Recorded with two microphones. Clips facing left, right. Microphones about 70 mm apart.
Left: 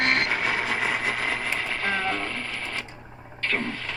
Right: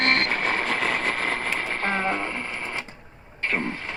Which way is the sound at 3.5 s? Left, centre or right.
Right.